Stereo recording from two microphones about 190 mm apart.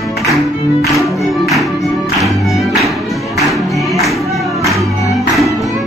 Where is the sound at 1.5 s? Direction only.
Centre (ahead or behind).